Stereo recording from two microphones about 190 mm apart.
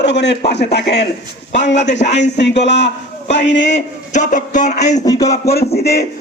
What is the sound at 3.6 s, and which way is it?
A man's voice, 40° left (ahead or behind).